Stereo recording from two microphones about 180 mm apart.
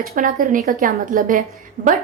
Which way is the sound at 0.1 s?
50° right (ahead or behind).